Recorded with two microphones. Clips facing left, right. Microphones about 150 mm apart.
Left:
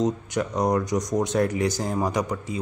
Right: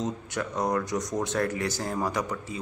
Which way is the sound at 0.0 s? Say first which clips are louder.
Left 6 dB; 15° left (ahead or behind).